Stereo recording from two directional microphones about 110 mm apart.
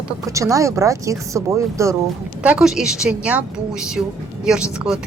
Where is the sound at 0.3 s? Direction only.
30° right (ahead or behind).